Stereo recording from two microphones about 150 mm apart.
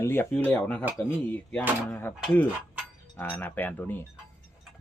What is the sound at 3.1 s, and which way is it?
Speech, 15° left (ahead or behind).